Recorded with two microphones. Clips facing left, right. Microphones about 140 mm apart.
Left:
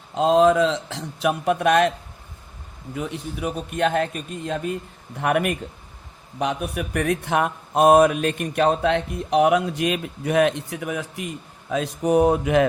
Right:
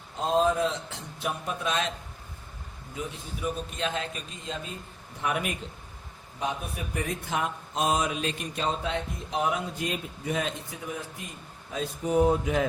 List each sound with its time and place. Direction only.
0.1 s a man's voice: 80° left; by 1.9 s 65° left (ahead or behind)
2.9 s a man's voice: 65° left (ahead or behind)
6.4 s speech: 75° left (ahead or behind)
11.7 s speech: 85° left